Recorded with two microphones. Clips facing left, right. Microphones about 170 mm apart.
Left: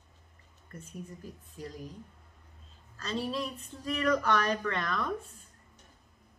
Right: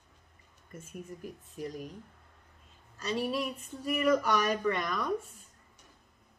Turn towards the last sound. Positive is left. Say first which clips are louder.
# right 2 dB
turn(degrees=-15)  # may be behind; listen again after turning